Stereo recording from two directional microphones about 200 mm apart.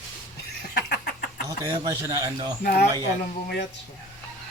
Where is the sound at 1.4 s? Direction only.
15° right (ahead or behind).